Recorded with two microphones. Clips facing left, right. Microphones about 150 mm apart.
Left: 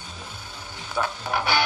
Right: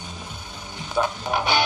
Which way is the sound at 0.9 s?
20° right (ahead or behind).